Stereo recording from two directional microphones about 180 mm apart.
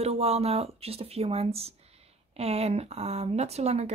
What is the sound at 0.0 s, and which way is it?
Speech, 35° right (ahead or behind).